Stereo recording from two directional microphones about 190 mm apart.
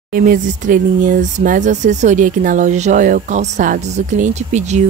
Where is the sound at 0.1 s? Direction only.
45° right (ahead or behind).